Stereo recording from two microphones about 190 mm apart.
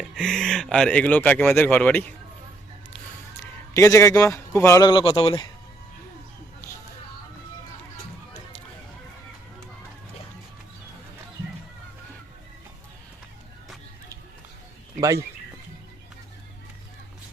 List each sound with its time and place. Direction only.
0.0 s speech: centre (ahead or behind)
3.4 s a man's voice: 15° left (ahead or behind)